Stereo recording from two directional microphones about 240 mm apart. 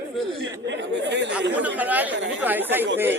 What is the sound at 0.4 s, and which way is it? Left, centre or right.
Chatter, right.